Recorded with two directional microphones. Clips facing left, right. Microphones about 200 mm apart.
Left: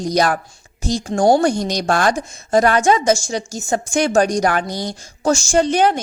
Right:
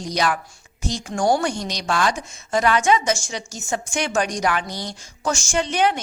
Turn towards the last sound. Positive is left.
turn(degrees=40)  # may be behind; listen again after turning